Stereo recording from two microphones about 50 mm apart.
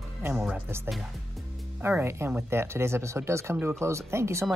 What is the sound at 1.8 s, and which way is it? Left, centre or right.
Speech, right.